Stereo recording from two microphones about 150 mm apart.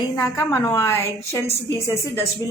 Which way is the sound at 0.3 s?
20° left (ahead or behind).